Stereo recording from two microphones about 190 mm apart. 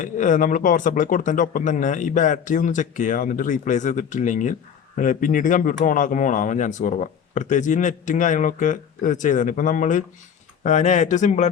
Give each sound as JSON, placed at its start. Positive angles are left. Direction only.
{"t": 0.0, "sound": "speech", "side_deg": 40}